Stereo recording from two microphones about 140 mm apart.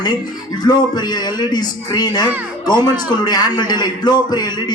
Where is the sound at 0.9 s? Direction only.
30° left (ahead or behind).